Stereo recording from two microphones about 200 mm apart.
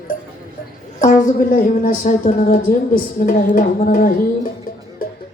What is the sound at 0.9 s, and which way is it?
A woman's voice, 40° left (ahead or behind).